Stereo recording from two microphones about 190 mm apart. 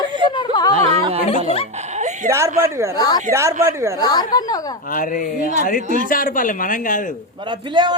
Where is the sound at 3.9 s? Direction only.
20° left (ahead or behind).